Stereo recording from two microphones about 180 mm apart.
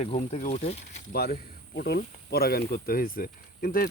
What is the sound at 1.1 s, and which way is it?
Speech, 60° left (ahead or behind).